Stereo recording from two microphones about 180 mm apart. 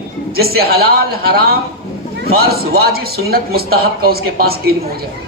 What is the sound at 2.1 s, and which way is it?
A man's voice, 60° right (ahead or behind).